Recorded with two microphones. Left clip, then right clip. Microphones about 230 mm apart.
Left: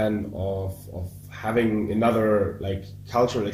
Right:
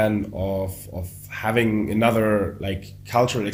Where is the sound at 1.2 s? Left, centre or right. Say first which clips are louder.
Right 2 dB; right.